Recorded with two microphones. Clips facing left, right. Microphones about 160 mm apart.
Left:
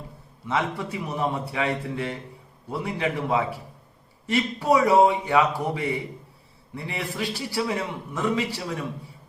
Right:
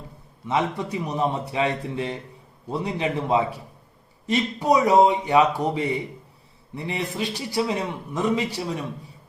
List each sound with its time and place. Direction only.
0.4 s a man's voice: 15° right (ahead or behind)